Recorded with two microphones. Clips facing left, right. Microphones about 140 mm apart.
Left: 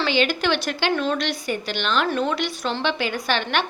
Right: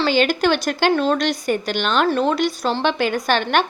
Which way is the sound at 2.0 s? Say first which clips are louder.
Right 5 dB; 35° right (ahead or behind).